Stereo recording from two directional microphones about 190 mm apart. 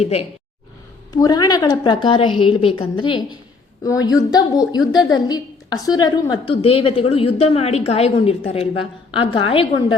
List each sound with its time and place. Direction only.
0.0 s speech: 35° left (ahead or behind)
1.1 s a woman's voice: 20° left (ahead or behind)